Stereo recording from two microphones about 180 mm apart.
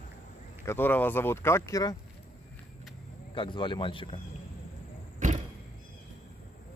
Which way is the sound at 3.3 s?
25° left (ahead or behind).